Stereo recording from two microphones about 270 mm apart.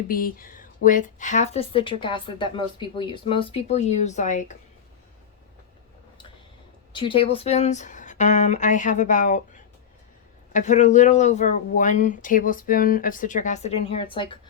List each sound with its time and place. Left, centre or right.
0.1 s a woman's voice: left
6.9 s a woman's voice: centre
10.5 s a woman's voice: left